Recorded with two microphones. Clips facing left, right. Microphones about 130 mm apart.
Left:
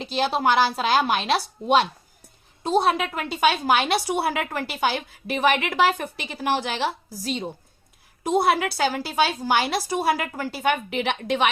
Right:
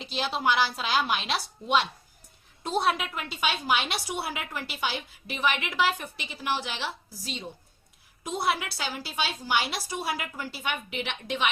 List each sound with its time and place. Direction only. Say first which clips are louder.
0.0 s a woman's voice: left 6 dB; 45° left (ahead or behind); by 11.5 s 65° left (ahead or behind)